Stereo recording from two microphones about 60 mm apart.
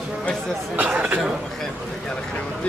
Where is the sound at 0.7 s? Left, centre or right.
Right.